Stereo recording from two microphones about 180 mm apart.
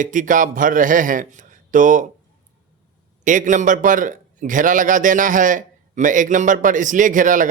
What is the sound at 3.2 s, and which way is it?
A man's voice, 45° right (ahead or behind).